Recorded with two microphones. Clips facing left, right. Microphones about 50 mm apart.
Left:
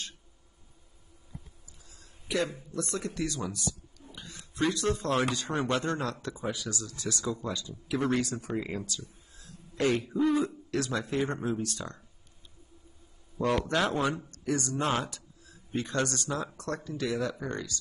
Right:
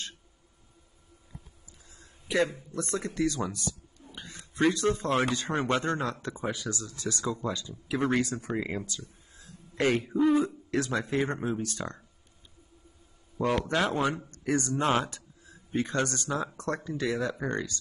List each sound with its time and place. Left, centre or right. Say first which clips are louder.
1.9 s a sound: right 1 dB; right
2.7 s a man's voice: right 1 dB; right
13.4 s a man's voice: even; centre
13.9 s speech: right 1 dB; right